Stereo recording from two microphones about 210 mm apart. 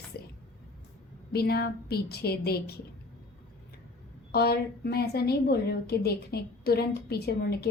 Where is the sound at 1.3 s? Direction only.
50° left (ahead or behind).